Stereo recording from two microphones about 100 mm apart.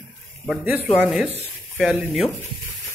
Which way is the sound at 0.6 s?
20° right (ahead or behind).